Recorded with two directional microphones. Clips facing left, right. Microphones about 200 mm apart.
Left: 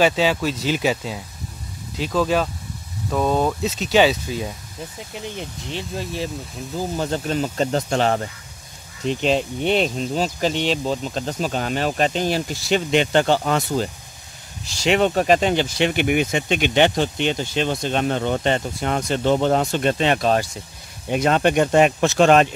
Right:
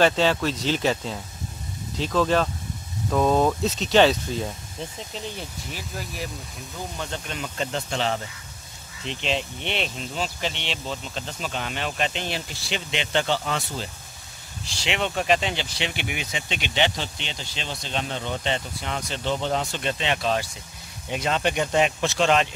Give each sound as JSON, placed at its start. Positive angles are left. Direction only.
{"t": 0.0, "sound": "speech", "side_deg": 5}
{"t": 5.2, "sound": "speech", "side_deg": 20}